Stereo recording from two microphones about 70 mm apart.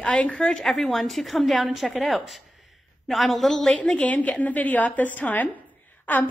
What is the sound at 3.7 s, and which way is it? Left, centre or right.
A woman's voice, centre.